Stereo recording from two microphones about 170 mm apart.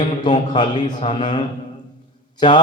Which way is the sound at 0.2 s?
25° left (ahead or behind).